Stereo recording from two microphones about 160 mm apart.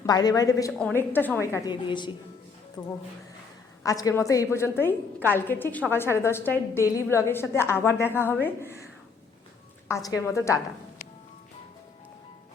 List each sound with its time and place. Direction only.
0.0 s a woman's voice: 25° left (ahead or behind)
0.7 s a woman's voice: 5° left (ahead or behind)
1.7 s a woman's voice: 30° left (ahead or behind)
2.8 s a woman's voice: 15° left (ahead or behind)
9.9 s a woman's voice: 20° left (ahead or behind)